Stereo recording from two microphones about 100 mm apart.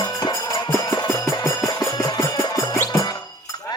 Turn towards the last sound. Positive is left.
turn(degrees=45)  # may be behind; listen again after turning